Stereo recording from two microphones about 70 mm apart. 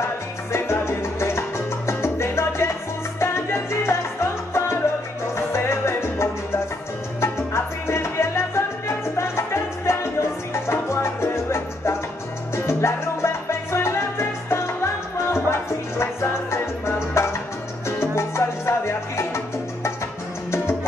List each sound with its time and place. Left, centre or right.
0.0 s salsa music: left
5.3 s music: left
7.2 s salsa music: left
10.5 s music: left
12.5 s salsa music: left
16.0 s music: left